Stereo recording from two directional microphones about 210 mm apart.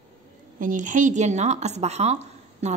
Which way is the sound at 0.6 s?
40° right (ahead or behind).